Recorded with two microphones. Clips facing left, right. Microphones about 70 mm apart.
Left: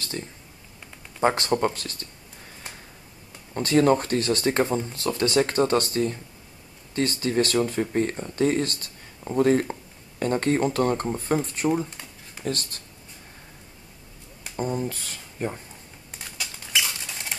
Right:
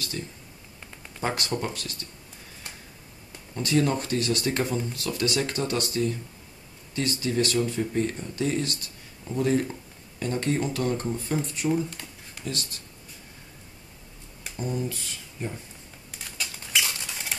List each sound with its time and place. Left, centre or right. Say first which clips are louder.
0.2 s speech: left 1 dB; left
3.5 s speech: left 5 dB; left
14.6 s speech: left 3 dB; left
16.7 s dishes: left 1 dB; centre